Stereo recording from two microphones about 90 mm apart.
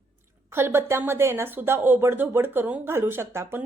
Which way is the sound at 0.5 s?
25° right (ahead or behind).